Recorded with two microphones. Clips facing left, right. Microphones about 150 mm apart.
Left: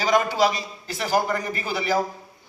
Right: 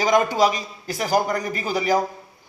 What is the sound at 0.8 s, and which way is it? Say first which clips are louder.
A man's voice: right 2 dB; 40° right (ahead or behind).